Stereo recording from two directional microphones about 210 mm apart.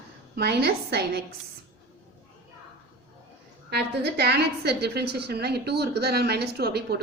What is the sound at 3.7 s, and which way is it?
A woman's voice, 50° right (ahead or behind).